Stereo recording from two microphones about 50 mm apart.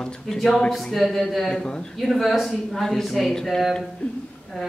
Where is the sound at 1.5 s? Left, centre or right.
Centre.